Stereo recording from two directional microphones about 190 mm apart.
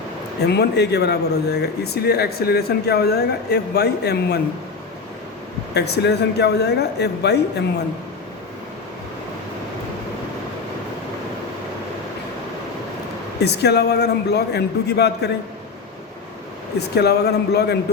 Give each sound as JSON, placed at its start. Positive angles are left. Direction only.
{"t": 0.4, "sound": "speech", "side_deg": 60}
{"t": 5.7, "sound": "speech", "side_deg": 60}
{"t": 13.4, "sound": "speech", "side_deg": 60}
{"t": 16.7, "sound": "speech", "side_deg": 60}